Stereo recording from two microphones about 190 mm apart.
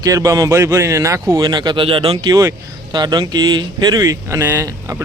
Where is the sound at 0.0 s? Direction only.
20° right (ahead or behind).